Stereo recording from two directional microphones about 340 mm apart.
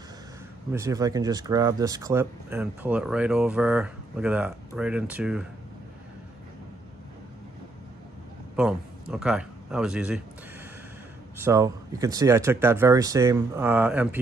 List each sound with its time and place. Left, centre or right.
0.7 s speech: centre
8.5 s a man's voice: centre
11.4 s speech: centre